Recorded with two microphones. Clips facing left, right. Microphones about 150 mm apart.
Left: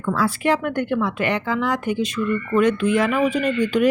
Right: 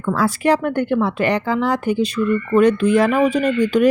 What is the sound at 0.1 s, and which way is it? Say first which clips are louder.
A woman's voice: right 3 dB; 45° right (ahead or behind).